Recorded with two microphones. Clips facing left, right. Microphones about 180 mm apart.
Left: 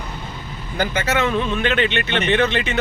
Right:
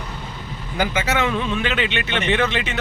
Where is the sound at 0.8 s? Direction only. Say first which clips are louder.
Left 1 dB; 15° right (ahead or behind).